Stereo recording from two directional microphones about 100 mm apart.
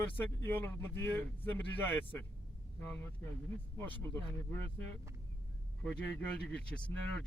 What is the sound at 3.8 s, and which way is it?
Speech, 25° left (ahead or behind).